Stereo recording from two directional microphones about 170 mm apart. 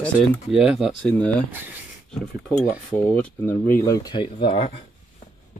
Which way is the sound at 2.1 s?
5° left (ahead or behind).